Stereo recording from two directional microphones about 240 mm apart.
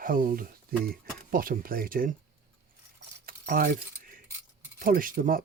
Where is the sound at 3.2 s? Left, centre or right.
Right.